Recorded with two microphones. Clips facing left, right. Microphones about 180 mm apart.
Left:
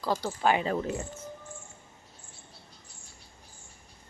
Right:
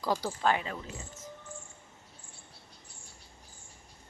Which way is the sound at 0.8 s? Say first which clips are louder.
Left 12 dB; 60° left (ahead or behind).